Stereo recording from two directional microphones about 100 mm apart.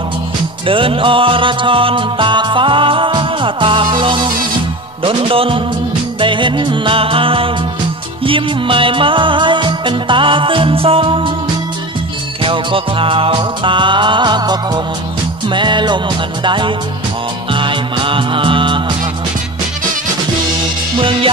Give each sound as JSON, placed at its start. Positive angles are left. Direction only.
{"t": 0.7, "sound": "music", "side_deg": -65}
{"t": 12.4, "sound": "music", "side_deg": -60}
{"t": 21.0, "sound": "music", "side_deg": -65}